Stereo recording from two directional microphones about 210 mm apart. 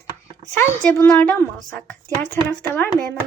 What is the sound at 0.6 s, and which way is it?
Speech, 10° left (ahead or behind).